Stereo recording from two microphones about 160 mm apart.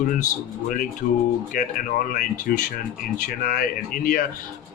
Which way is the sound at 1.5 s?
55° left (ahead or behind).